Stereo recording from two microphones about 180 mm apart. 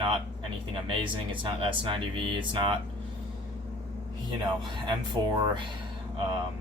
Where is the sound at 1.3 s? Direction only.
30° right (ahead or behind).